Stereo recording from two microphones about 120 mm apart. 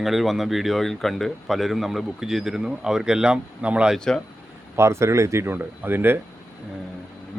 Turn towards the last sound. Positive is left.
turn(degrees=-15)  # may be behind; listen again after turning